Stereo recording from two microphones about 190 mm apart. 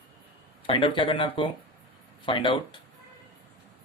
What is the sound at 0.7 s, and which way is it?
Speech, 25° left (ahead or behind).